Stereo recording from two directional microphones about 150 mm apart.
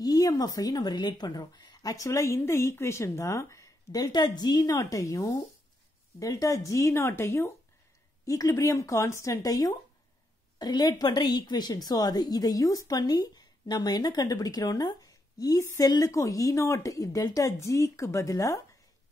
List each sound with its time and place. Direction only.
0.0 s a woman's voice: 25° left (ahead or behind)